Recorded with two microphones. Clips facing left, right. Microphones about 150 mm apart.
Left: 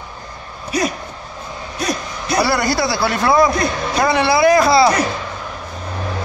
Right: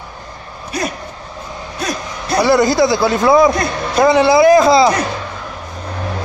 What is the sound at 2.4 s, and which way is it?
A man's voice, 20° right (ahead or behind).